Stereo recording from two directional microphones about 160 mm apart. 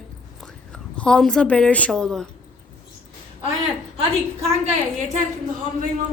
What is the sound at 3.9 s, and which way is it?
Speech, 40° right (ahead or behind).